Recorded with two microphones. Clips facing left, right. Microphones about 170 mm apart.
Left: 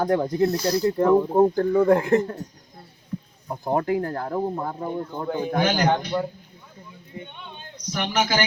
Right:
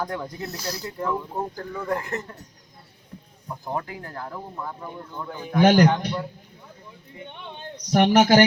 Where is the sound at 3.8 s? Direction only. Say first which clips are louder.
Left 11 dB; 40° left (ahead or behind).